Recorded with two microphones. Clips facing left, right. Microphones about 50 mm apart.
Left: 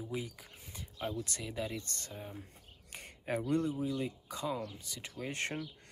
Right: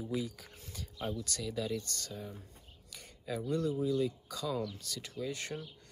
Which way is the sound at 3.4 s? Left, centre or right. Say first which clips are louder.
Even; left.